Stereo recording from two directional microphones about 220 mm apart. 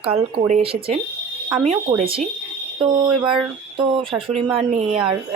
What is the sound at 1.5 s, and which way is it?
Speech, 5° right (ahead or behind).